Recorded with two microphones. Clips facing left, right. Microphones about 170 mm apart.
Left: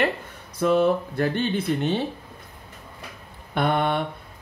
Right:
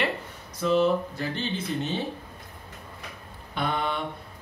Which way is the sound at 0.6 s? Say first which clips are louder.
Left 3 dB; 55° left (ahead or behind).